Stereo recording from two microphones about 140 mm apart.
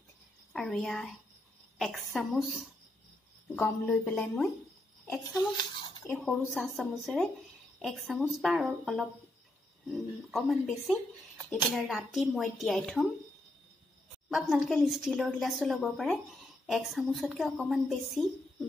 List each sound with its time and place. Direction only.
0.5 s a woman's voice: centre (ahead or behind)
5.3 s a sound: 30° left (ahead or behind)
6.0 s speech: 5° left (ahead or behind)
14.3 s speech: centre (ahead or behind)